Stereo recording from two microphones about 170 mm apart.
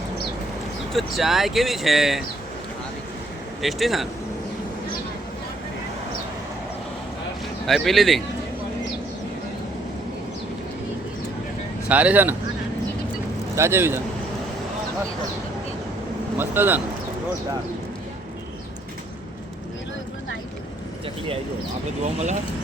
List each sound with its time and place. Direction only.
0.9 s speech: centre (ahead or behind)
3.6 s speech: centre (ahead or behind)
7.7 s speech: centre (ahead or behind)
11.9 s speech: 10° right (ahead or behind)
13.6 s speech: 15° right (ahead or behind)
16.4 s speech: 10° right (ahead or behind)
22.0 s speech: 45° right (ahead or behind)